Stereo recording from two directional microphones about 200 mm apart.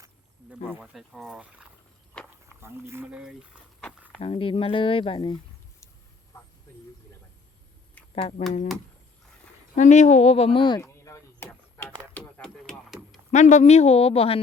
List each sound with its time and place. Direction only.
0.5 s speech: centre (ahead or behind)
2.2 s walk: 5° left (ahead or behind)
2.6 s speech: 10° right (ahead or behind)
4.2 s speech: 25° left (ahead or behind)
8.1 s speech: 35° left (ahead or behind)
9.7 s speech: 35° left (ahead or behind)
10.8 s a sound: 15° left (ahead or behind)
12.1 s music: centre (ahead or behind)
13.3 s speech: 35° left (ahead or behind)